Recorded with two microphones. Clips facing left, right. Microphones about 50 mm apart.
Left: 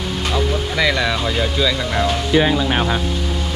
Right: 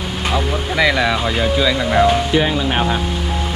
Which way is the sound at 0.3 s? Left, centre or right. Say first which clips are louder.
Right 1 dB; centre.